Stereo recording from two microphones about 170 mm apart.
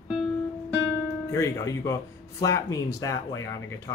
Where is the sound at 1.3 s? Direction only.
20° left (ahead or behind).